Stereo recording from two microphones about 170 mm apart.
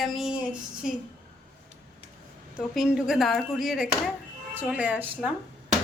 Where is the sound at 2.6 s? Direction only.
Centre (ahead or behind).